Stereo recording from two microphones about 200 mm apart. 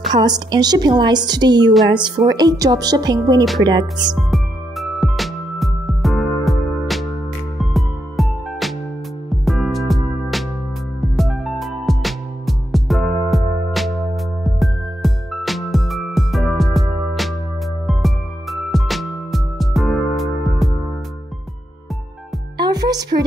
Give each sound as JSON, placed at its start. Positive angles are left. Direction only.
{"t": 0.1, "sound": "a woman's voice", "side_deg": -20}
{"t": 1.7, "sound": "a woman's voice", "side_deg": 0}
{"t": 2.0, "sound": "a woman's voice", "side_deg": -20}
{"t": 4.1, "sound": "music", "side_deg": 0}
{"t": 22.6, "sound": "music", "side_deg": -20}